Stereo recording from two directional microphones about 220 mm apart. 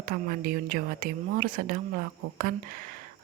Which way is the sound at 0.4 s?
40° right (ahead or behind).